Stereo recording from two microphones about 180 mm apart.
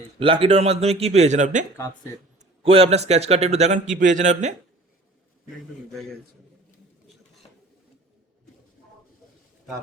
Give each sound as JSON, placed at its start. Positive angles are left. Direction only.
{"t": 0.2, "sound": "a man's voice", "side_deg": -30}
{"t": 2.6, "sound": "a man's voice", "side_deg": -35}